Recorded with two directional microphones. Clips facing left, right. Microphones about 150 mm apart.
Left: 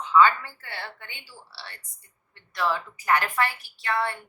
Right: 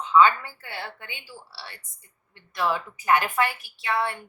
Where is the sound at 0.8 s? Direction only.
15° right (ahead or behind).